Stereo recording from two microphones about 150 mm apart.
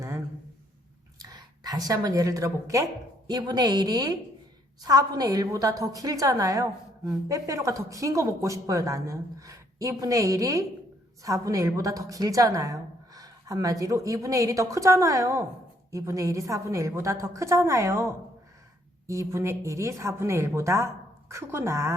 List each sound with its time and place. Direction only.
1.2 s a woman's voice: 25° right (ahead or behind)